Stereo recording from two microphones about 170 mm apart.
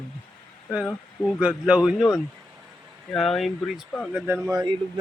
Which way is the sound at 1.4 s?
10° right (ahead or behind).